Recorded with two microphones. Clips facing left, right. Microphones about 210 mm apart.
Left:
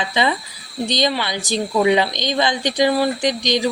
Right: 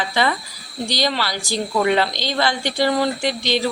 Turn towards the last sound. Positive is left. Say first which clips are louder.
# left 2 dB
turn(degrees=15)  # may be behind; listen again after turning